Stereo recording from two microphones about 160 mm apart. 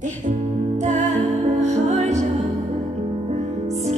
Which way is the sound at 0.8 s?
50° right (ahead or behind).